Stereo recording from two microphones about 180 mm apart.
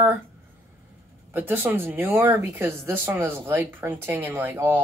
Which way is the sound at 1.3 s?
10° right (ahead or behind).